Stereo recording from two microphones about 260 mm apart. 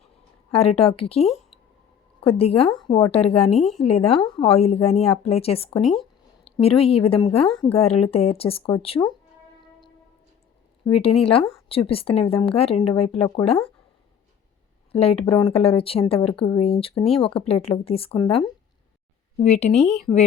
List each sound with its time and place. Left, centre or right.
0.5 s a woman's voice: left
3.5 s speech: centre
3.8 s a woman's voice: left
5.8 s speech: centre
6.4 s a woman's voice: left
10.8 s a woman's voice: left
14.9 s a woman's voice: left
19.7 s speech: centre